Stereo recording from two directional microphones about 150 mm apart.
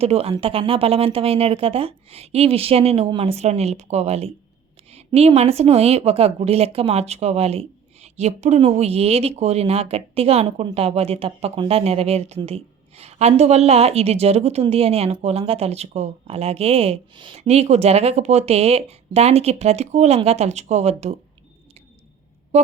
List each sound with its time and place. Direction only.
0.0 s a woman's voice: 40° right (ahead or behind)
22.5 s a woman's voice: 50° right (ahead or behind)